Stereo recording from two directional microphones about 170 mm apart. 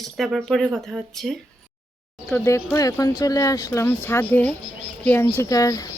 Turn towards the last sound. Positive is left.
turn(degrees=20)  # may be behind; listen again after turning